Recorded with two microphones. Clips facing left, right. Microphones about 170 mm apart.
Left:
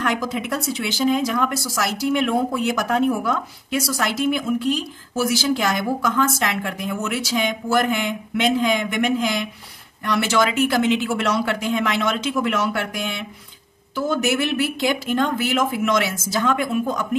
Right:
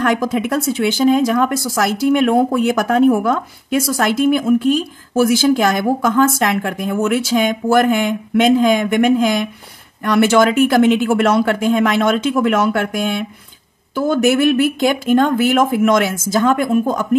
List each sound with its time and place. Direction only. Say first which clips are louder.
0.0 s speech: right 7 dB; 55° right (ahead or behind)